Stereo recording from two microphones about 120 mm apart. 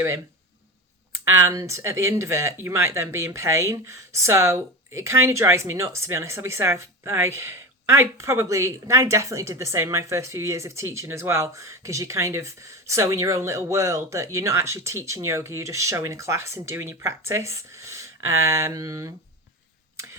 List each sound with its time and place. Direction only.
1.1 s speech: 20° right (ahead or behind)